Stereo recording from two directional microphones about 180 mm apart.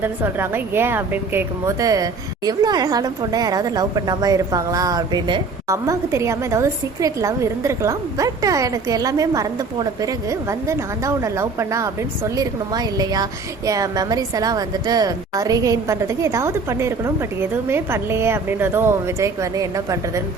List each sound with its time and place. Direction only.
0.0 s a woman's voice: 10° right (ahead or behind)